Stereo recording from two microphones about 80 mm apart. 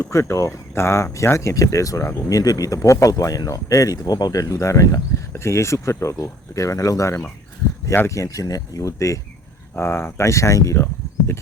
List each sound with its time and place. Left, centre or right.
0.0 s speech: left